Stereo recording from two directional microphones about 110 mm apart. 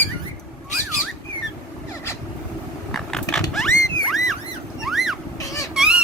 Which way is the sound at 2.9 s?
5° left (ahead or behind).